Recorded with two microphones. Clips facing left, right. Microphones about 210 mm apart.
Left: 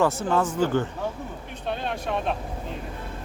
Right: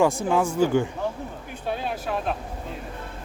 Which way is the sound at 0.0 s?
10° right (ahead or behind).